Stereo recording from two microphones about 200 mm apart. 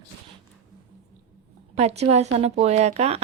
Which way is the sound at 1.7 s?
35° right (ahead or behind).